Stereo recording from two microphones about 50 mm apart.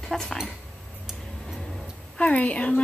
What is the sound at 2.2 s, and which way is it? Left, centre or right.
Speech, left.